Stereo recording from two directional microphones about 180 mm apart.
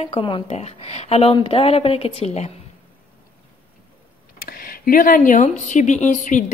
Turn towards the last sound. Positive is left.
turn(degrees=40)  # may be behind; listen again after turning